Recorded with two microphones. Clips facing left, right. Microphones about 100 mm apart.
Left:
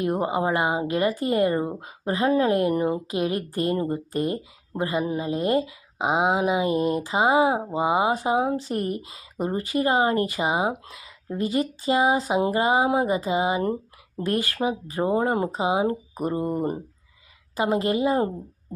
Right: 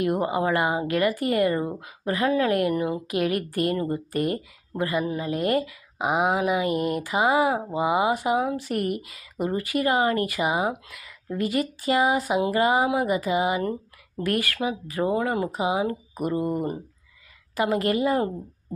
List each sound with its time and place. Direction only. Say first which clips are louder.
0.0 s speech: even; 25° left (ahead or behind)